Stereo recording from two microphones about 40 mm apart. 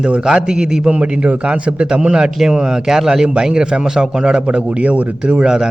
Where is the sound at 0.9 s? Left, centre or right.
Right.